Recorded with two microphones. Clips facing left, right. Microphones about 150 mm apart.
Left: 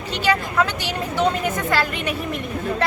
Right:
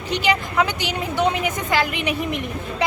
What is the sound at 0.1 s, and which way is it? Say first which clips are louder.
Speech: even; 15° right (ahead or behind).